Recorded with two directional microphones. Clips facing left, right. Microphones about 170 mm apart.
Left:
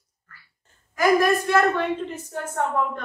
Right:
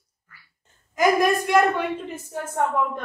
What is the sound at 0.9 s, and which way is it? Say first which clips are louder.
A woman's voice: even; 15° right (ahead or behind).